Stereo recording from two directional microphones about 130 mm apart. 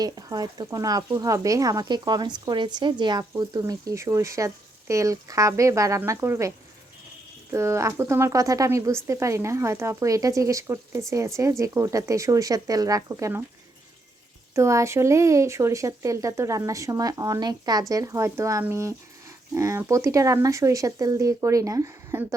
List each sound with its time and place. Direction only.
0.0 s speech: 30° right (ahead or behind)
7.5 s speech: 20° right (ahead or behind)
14.5 s speech: 25° right (ahead or behind)